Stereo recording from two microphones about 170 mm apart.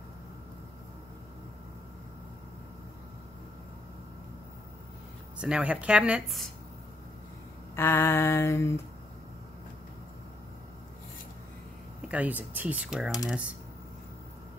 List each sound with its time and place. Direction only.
5.4 s speech: 5° right (ahead or behind)
7.7 s a sound: 15° left (ahead or behind)
12.1 s speech: 10° right (ahead or behind)